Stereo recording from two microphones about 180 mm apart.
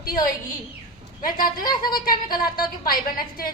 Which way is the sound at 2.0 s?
55° left (ahead or behind).